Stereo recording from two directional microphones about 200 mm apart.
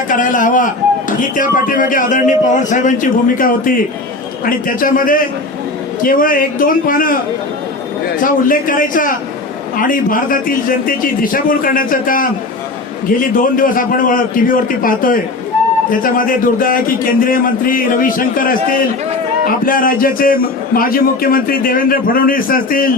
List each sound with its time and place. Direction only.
0.1 s a man's voice: 40° left (ahead or behind)
8.2 s a man's voice: 45° left (ahead or behind)
13.3 s a man's voice: 45° left (ahead or behind)